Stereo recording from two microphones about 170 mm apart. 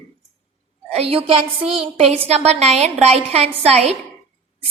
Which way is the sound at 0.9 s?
35° right (ahead or behind).